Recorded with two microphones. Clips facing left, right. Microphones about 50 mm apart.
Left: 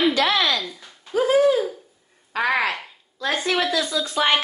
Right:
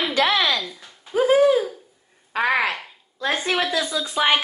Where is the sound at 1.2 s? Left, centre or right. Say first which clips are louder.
Right 1 dB; centre.